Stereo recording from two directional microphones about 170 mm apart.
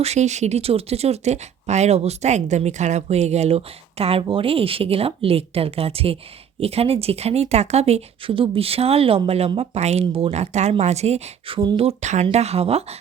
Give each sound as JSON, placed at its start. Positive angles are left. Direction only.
{"t": 0.0, "sound": "speech", "side_deg": -40}